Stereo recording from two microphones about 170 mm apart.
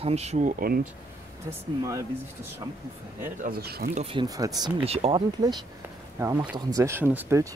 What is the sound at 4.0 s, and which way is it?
Speech, 35° right (ahead or behind).